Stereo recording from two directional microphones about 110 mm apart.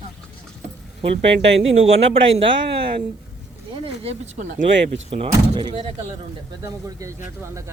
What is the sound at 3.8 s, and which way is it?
Speech, 80° right.